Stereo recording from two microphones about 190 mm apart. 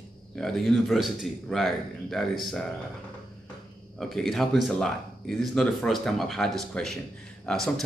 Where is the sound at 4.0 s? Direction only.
Centre (ahead or behind).